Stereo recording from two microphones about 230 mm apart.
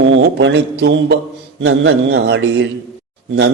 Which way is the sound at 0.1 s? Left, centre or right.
Right.